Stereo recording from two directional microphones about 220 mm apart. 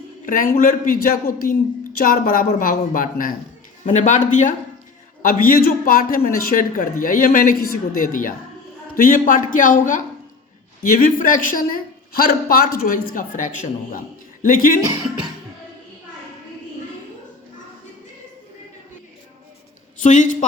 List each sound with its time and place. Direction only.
0.3 s a man's voice: 40° left (ahead or behind)
20.0 s a man's voice: 35° left (ahead or behind)